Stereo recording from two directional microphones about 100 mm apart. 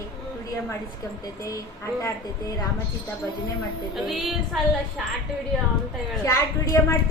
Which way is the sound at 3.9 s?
Centre (ahead or behind).